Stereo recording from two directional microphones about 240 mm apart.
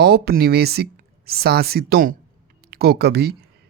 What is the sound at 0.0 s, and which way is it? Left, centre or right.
Speech, right.